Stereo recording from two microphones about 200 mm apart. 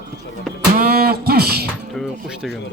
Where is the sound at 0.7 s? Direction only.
50° right (ahead or behind).